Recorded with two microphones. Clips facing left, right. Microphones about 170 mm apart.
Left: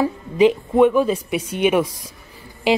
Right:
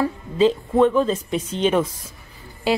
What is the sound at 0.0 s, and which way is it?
Speech, 15° left (ahead or behind).